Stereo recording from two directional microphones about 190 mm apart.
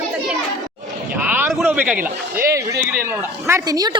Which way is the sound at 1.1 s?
10° right (ahead or behind).